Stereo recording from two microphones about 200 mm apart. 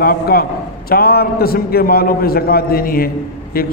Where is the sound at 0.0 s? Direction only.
50° left (ahead or behind).